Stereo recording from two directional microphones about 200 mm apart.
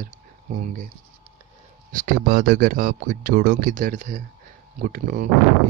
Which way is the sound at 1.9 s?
45° right (ahead or behind).